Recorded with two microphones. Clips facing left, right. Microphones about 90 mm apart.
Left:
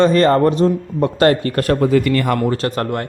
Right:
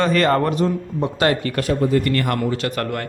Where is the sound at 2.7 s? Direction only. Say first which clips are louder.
Left 3 dB; 30° left (ahead or behind).